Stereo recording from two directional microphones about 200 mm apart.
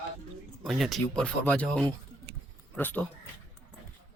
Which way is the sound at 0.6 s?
Centre (ahead or behind).